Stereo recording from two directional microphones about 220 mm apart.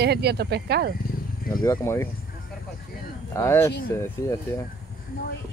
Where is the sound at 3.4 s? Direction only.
10° left (ahead or behind).